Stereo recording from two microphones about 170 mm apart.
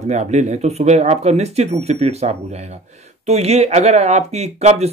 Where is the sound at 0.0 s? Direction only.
40° right (ahead or behind).